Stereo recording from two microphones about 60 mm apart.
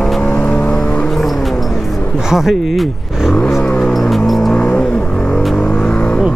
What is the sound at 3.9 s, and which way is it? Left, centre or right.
Vehicle, centre.